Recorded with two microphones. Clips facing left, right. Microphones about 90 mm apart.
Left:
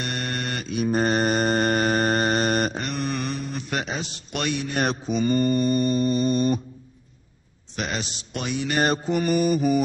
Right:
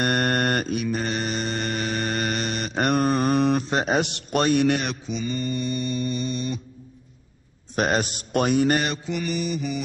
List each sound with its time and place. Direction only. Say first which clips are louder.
0.0 s mantra: right 7 dB; 50° right (ahead or behind)
0.7 s mantra: left 4 dB; 40° left (ahead or behind)
2.7 s mantra: right 7 dB; 55° right (ahead or behind)
3.1 s mantra: right 7 dB; 40° right (ahead or behind)
3.8 s a sound: right 8 dB; 60° right (ahead or behind)
4.3 s a man's voice: right 6 dB; 40° right (ahead or behind)
4.8 s mantra: left 6 dB; 45° left (ahead or behind)
7.7 s a man's voice: right 7 dB; 45° right (ahead or behind)
8.7 s mantra: left 3 dB; 40° left (ahead or behind)